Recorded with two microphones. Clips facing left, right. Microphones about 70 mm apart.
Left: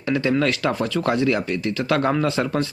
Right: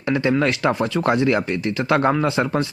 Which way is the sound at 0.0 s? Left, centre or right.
Right.